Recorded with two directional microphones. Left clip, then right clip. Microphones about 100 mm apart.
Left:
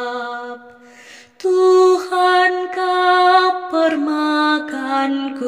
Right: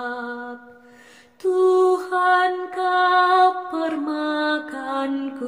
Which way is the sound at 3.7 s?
25° left (ahead or behind).